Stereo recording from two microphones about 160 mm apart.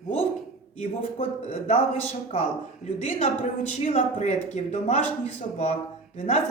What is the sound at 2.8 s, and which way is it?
A woman's voice, 45° left (ahead or behind).